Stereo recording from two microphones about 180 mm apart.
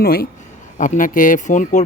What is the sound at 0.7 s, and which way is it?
Speech, 45° left (ahead or behind).